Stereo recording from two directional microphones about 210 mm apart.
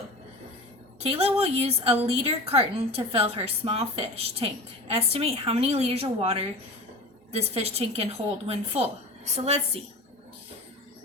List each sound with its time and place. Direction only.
0.9 s a woman's voice: 30° right (ahead or behind)